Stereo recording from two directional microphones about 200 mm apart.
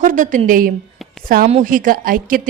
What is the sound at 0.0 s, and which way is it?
A woman's voice, 40° right (ahead or behind).